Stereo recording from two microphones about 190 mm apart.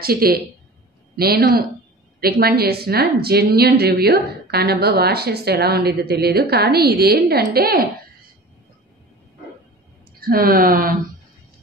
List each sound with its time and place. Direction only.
0.0 s a woman's voice: 50° right (ahead or behind)
10.2 s speech: 50° right (ahead or behind)